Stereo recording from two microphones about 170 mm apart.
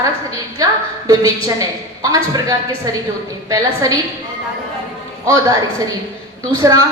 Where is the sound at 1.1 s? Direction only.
20° right (ahead or behind).